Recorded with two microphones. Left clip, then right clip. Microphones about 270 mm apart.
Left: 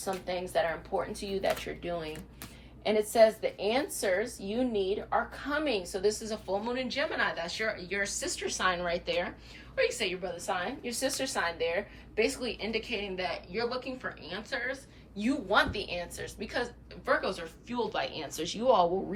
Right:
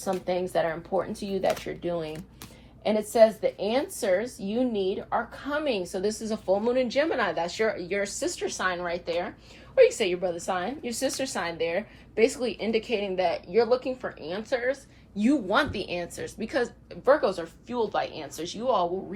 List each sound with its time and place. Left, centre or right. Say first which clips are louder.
0.0 s speech: right 6 dB; right
3.2 s a woman's voice: right 4 dB; right; by 9.3 s centre
9.7 s a woman's voice: right 9 dB; centre